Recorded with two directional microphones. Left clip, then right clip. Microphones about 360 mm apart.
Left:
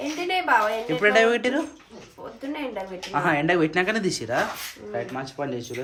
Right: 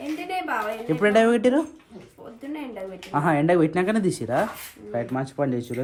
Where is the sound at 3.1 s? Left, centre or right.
Centre.